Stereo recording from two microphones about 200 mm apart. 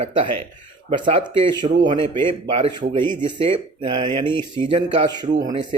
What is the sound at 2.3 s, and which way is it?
Speech, 25° right (ahead or behind).